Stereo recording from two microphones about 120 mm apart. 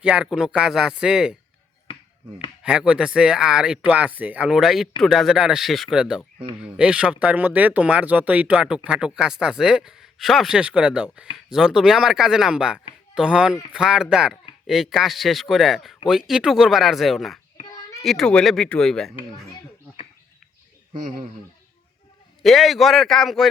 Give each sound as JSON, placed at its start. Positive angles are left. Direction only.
{"t": 0.0, "sound": "speech", "side_deg": -10}
{"t": 2.6, "sound": "speech", "side_deg": -5}
{"t": 22.4, "sound": "speech", "side_deg": 0}